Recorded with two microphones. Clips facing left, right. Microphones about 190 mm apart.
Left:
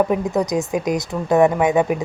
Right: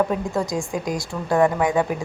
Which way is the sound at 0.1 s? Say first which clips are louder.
Left 4 dB; 20° left (ahead or behind).